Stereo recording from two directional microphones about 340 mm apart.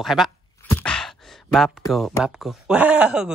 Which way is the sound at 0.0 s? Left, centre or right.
Centre.